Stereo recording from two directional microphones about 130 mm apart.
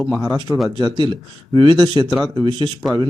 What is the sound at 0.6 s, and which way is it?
Speech, 30° right (ahead or behind).